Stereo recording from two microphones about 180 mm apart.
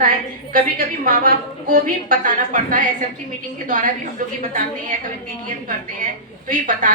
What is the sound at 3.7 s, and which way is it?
Speech, 45° right (ahead or behind).